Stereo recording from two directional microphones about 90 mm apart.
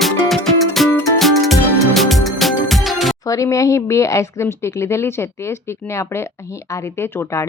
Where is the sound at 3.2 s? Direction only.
40° left (ahead or behind).